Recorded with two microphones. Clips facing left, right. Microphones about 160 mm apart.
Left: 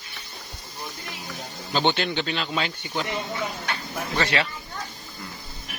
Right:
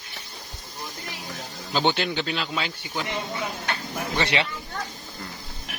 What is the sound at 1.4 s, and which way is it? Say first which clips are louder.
Speech: even; 5° right (ahead or behind).